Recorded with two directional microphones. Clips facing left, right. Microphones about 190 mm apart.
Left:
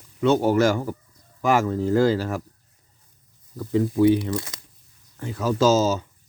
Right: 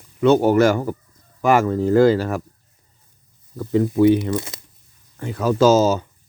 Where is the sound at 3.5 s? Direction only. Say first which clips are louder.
Right 3 dB; 60° right (ahead or behind).